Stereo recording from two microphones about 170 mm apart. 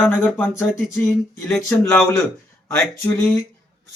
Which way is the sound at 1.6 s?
15° left (ahead or behind).